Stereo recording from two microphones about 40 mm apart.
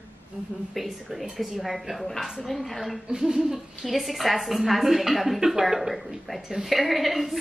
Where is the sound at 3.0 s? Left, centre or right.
Centre.